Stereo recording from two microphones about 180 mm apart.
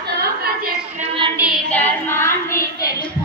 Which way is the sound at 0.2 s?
60° right (ahead or behind).